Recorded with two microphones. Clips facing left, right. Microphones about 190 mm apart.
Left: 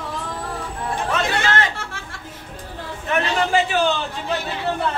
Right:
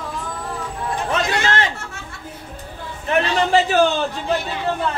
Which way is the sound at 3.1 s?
35° right (ahead or behind).